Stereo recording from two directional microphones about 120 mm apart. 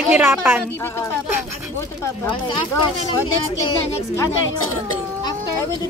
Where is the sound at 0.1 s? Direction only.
15° right (ahead or behind).